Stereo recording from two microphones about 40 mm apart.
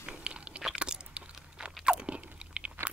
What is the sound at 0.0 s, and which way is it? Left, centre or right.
Biting, right.